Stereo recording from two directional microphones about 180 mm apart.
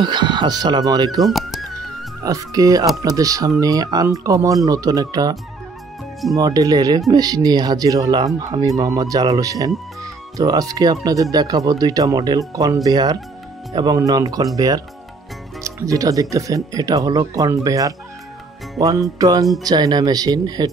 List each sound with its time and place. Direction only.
0.0 s speech: 25° right (ahead or behind)
1.2 s music: centre (ahead or behind)
2.2 s speech: 20° right (ahead or behind)
15.6 s speech: 20° right (ahead or behind)